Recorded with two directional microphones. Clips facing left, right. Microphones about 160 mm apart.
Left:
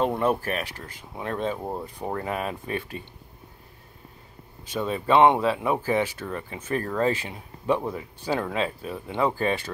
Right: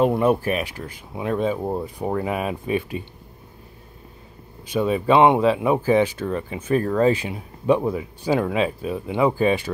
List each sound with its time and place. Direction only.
0.0 s speech: 10° right (ahead or behind)
4.6 s speech: 15° right (ahead or behind)